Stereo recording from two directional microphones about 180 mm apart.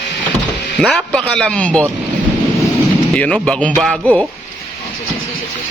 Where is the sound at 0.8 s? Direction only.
Centre (ahead or behind).